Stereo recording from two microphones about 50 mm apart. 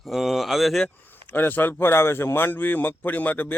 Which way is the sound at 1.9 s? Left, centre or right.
Left.